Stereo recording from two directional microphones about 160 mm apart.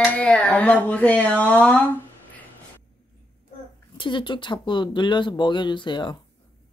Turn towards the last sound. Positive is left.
turn(degrees=30)  # may be behind; listen again after turning